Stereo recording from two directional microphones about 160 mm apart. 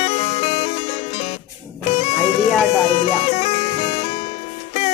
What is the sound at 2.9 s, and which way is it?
Music, 40° left (ahead or behind).